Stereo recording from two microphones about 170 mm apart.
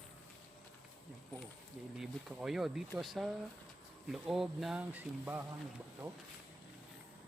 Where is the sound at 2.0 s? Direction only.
Centre (ahead or behind).